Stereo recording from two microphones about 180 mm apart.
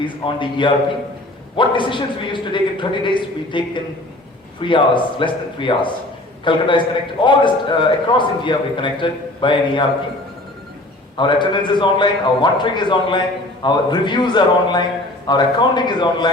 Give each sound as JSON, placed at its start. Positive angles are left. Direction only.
{"t": 0.0, "sound": "a man's voice", "side_deg": 25}
{"t": 4.6, "sound": "a man's voice", "side_deg": 25}
{"t": 11.2, "sound": "a man's voice", "side_deg": 25}